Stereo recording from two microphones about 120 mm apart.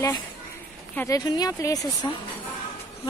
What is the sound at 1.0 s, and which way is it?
Speech, 35° left (ahead or behind).